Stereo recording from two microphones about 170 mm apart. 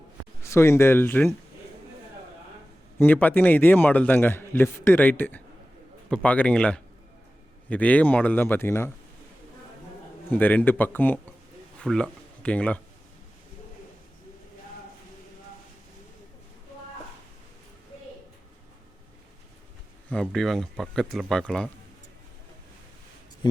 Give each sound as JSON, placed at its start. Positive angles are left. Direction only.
{"t": 0.4, "sound": "a man's voice", "side_deg": 15}
{"t": 3.0, "sound": "a man's voice", "side_deg": 10}
{"t": 10.3, "sound": "a man's voice", "side_deg": 10}
{"t": 20.1, "sound": "speech", "side_deg": 5}